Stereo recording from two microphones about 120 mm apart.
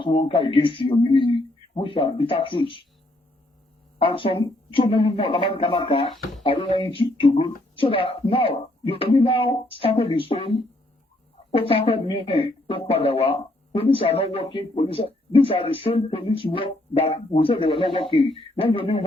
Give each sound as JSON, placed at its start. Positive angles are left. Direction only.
{"t": 0.0, "sound": "speech", "side_deg": 50}
{"t": 3.9, "sound": "speech", "side_deg": 45}